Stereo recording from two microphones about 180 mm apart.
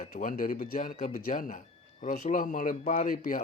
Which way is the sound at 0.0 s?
50° left (ahead or behind).